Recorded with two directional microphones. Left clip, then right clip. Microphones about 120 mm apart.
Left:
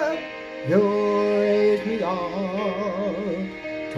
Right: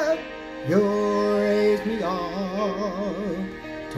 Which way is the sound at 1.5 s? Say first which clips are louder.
Left 1 dB; 10° left (ahead or behind).